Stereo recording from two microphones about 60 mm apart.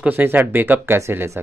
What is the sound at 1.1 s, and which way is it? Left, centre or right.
Speech, right.